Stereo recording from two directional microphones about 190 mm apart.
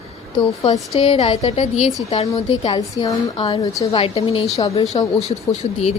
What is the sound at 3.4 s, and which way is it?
A woman's voice, 30° left (ahead or behind).